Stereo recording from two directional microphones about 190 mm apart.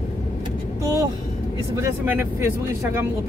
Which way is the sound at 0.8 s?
15° right (ahead or behind).